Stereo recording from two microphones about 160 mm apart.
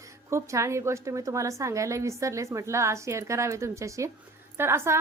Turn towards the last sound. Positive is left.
turn(degrees=-15)  # may be behind; listen again after turning